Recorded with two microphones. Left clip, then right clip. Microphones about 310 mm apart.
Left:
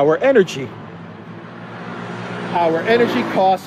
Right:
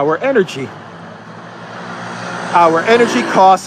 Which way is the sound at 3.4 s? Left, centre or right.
Right.